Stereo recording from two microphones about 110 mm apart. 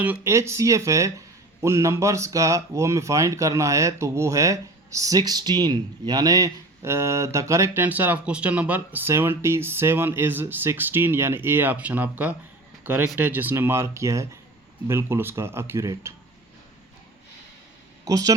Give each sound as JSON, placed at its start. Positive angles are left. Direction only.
{"t": 0.0, "sound": "speech", "side_deg": -20}
{"t": 18.0, "sound": "speech", "side_deg": -35}